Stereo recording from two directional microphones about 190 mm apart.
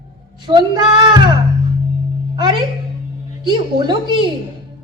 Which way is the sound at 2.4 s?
25° right (ahead or behind).